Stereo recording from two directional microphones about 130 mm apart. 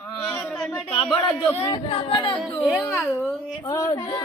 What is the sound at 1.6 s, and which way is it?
Speech, 35° left (ahead or behind).